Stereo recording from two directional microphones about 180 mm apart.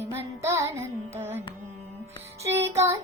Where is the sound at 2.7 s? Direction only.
15° right (ahead or behind).